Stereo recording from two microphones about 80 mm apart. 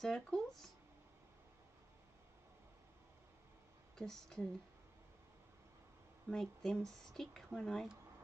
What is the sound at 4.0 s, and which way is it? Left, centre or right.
Speech, centre.